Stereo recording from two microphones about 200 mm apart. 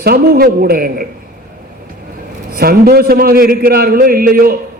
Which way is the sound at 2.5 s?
50° right (ahead or behind).